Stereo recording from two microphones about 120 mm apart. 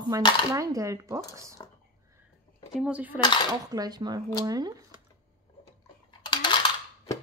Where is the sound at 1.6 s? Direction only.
35° left (ahead or behind).